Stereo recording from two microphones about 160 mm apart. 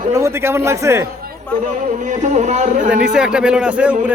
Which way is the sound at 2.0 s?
50° right (ahead or behind).